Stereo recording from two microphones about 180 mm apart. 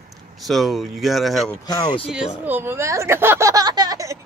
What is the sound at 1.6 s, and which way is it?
Speech, 25° left (ahead or behind).